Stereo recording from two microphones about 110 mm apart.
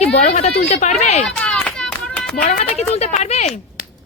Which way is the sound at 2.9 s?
85° left.